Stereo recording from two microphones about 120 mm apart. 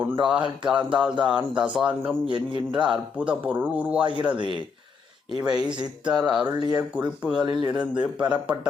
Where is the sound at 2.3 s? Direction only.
45° right (ahead or behind).